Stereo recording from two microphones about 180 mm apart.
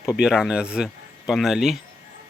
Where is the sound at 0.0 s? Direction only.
5° right (ahead or behind).